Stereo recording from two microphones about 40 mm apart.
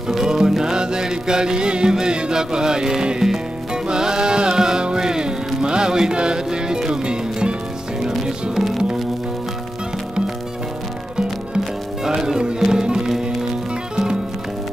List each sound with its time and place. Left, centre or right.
0.1 s music: centre
12.0 s music: centre